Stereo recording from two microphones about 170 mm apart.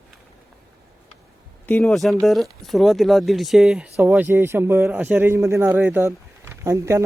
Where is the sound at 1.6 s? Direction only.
5° left (ahead or behind).